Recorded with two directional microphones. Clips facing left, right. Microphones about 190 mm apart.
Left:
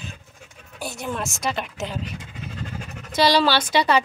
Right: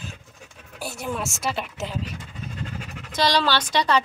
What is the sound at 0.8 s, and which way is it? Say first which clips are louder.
A woman's voice: even; 5° right (ahead or behind).